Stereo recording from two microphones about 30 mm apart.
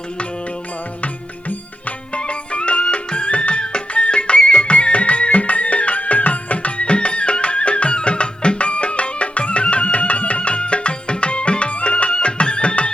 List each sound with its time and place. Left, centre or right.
2.1 s music: left
3.6 s music: left